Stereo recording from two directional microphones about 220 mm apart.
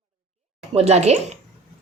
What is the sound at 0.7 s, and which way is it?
Speech, 30° right (ahead or behind).